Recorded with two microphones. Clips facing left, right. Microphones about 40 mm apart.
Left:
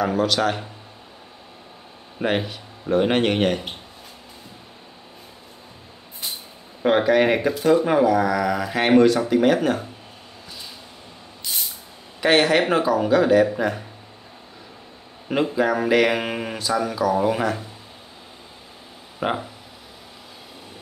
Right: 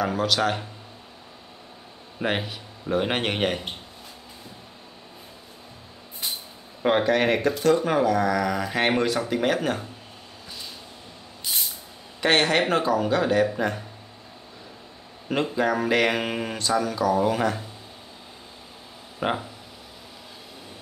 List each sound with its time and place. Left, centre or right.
0.0 s speech: centre
2.1 s speech: centre
6.8 s speech: centre
12.2 s speech: centre
15.2 s speech: centre
19.1 s speech: centre